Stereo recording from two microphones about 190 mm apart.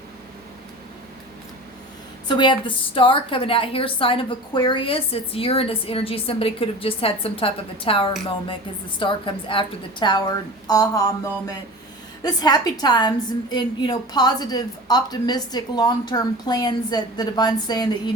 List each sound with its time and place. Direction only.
2.2 s a woman's voice: 25° left (ahead or behind)